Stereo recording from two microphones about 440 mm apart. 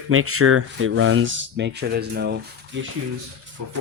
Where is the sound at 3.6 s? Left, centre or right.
Right.